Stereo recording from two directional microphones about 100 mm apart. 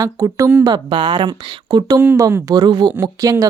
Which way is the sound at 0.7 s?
45° right (ahead or behind).